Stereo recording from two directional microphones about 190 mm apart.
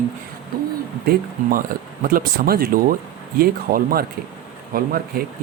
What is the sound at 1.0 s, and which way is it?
Speech, 55° right (ahead or behind).